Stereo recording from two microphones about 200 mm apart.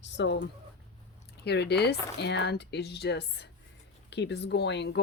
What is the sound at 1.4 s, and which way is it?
Speech, 55° left (ahead or behind).